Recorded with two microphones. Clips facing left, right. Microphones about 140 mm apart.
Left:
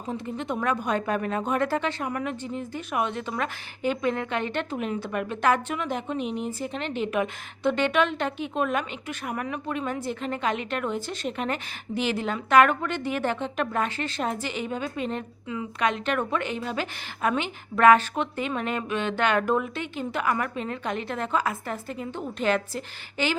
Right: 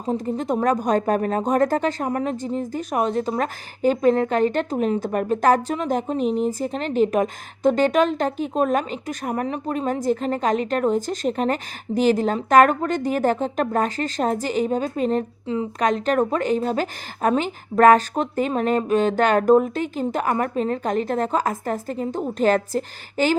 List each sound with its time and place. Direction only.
0.0 s speech: 35° right (ahead or behind)